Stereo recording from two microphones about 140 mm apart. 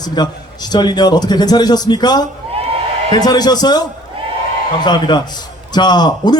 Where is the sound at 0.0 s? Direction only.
30° left (ahead or behind).